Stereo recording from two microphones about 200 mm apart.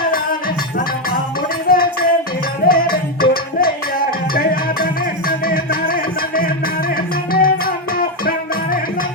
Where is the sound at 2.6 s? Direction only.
45° left (ahead or behind).